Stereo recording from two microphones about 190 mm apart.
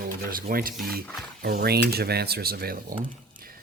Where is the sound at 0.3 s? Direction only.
50° right (ahead or behind).